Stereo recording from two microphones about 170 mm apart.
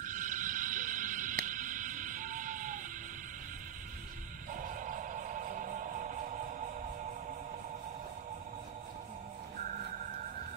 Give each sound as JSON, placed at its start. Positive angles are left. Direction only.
{"t": 0.0, "sound": "frog", "side_deg": -50}
{"t": 4.5, "sound": "music", "side_deg": -50}
{"t": 9.7, "sound": "music", "side_deg": -50}